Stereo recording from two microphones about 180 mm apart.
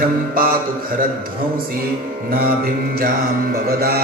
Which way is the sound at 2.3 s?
55° right (ahead or behind).